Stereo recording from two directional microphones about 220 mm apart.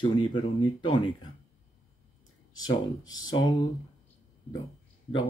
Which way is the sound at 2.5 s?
65° left (ahead or behind).